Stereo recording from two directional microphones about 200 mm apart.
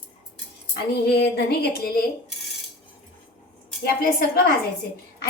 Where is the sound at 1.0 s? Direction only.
55° left (ahead or behind).